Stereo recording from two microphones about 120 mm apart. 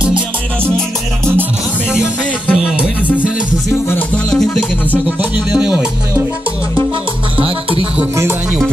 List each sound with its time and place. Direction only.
2.4 s music: 5° right (ahead or behind)
4.3 s music: 5° left (ahead or behind)
5.5 s music: 5° right (ahead or behind)
7.3 s music: 50° right (ahead or behind)